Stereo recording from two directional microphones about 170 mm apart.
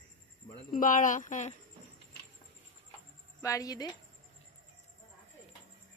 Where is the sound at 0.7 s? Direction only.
50° left (ahead or behind).